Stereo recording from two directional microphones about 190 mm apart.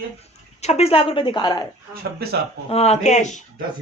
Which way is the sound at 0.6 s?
35° left (ahead or behind).